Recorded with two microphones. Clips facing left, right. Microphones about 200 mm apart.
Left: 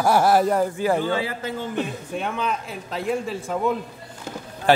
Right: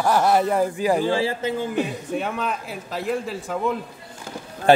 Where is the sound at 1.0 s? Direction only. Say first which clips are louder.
Right 3 dB; 30° right (ahead or behind).